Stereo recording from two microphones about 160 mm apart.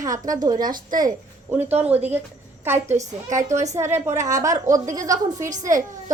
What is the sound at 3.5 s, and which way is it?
Speech, 50° right (ahead or behind).